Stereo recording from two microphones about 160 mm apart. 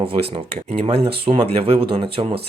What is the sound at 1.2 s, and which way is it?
Speech, 40° right (ahead or behind).